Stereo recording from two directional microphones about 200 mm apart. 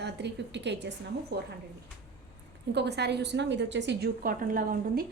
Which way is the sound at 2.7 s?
55° right (ahead or behind).